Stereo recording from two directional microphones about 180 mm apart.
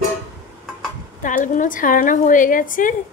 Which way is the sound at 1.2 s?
45° left (ahead or behind).